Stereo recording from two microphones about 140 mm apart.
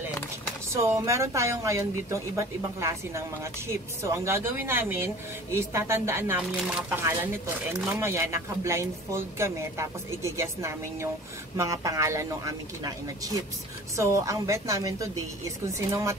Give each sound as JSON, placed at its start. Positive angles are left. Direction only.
{"t": 0.7, "sound": "speech", "side_deg": -20}